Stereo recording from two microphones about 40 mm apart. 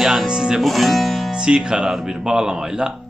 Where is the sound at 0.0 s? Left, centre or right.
Centre.